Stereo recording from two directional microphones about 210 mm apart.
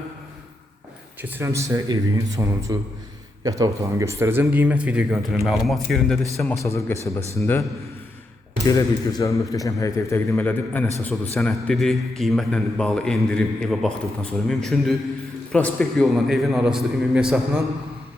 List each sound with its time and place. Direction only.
1.2 s a man's voice: 10° right (ahead or behind)
6.7 s speech: 15° left (ahead or behind)
8.6 s a man's voice: 15° left (ahead or behind); by 17.6 s 5° right (ahead or behind)